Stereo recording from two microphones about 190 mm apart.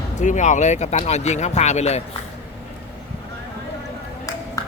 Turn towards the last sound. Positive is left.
turn(degrees=15)  # may be behind; listen again after turning